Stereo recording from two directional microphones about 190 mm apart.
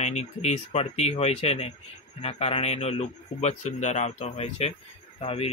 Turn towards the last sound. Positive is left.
turn(degrees=30)  # may be behind; listen again after turning